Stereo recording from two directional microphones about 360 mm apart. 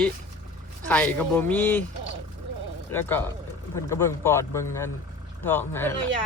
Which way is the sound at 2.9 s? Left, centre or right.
Centre.